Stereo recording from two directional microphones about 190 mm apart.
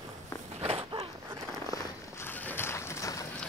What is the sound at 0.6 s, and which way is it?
Walk, 30° right (ahead or behind).